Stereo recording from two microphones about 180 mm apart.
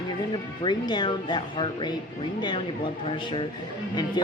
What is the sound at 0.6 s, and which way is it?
A woman's voice, 25° left (ahead or behind).